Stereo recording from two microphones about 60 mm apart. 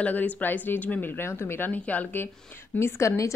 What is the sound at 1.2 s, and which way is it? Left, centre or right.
A woman's voice, left.